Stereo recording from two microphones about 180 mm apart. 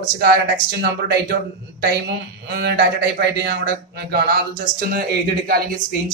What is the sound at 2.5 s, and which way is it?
A man's voice, 65° right (ahead or behind).